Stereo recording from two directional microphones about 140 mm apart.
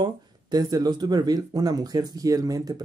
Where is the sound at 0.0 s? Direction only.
30° right (ahead or behind).